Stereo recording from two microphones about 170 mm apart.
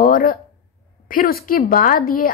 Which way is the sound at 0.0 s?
60° left (ahead or behind).